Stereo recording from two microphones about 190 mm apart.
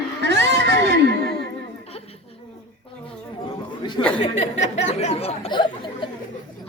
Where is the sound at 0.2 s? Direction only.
65° right (ahead or behind).